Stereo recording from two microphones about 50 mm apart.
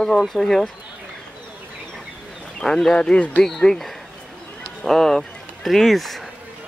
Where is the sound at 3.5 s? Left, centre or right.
Centre.